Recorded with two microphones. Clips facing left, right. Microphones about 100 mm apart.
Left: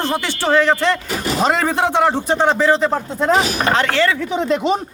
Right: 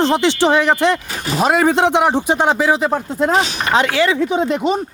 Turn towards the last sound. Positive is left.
turn(degrees=-20)  # may be behind; listen again after turning